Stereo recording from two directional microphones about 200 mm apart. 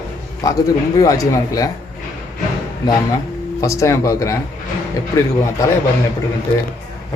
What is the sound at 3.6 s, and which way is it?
Speech, 15° left (ahead or behind).